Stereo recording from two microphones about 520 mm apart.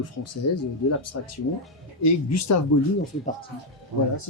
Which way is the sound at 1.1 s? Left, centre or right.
Left.